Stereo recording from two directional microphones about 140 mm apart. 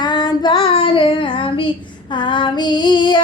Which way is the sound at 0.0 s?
30° left (ahead or behind).